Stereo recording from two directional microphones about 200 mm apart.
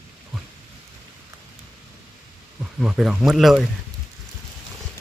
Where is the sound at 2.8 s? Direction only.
Centre (ahead or behind).